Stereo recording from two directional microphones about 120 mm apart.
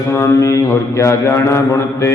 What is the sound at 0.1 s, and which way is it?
Mantra, 25° left (ahead or behind).